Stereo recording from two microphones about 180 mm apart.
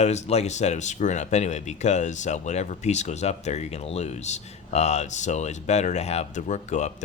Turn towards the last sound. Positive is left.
turn(degrees=40)  # may be behind; listen again after turning